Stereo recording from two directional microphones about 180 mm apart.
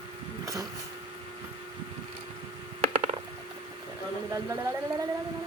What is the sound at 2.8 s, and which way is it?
Mechanisms, 35° right (ahead or behind).